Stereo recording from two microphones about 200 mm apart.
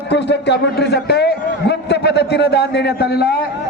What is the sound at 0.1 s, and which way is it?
A man's voice, 60° left (ahead or behind).